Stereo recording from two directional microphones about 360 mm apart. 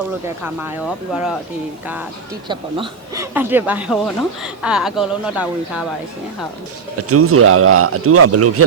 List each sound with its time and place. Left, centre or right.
1.1 s speech: centre
2.5 s speech: centre
7.1 s speech: right